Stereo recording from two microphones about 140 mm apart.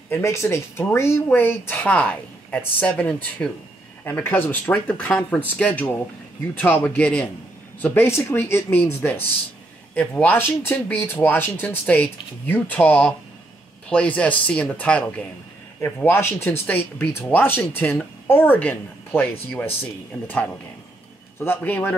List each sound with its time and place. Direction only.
0.1 s speech: 20° left (ahead or behind)
21.4 s speech: 15° left (ahead or behind)